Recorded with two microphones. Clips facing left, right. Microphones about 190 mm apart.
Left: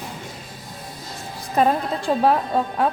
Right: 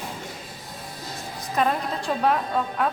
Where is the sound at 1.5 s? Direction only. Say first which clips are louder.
Left 5 dB; 35° left (ahead or behind).